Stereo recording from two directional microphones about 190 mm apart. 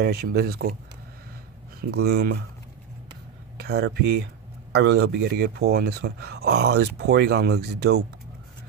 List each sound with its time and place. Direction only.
0.0 s speech: 55° right (ahead or behind)
1.8 s speech: 55° right (ahead or behind)
3.5 s speech: 60° right (ahead or behind)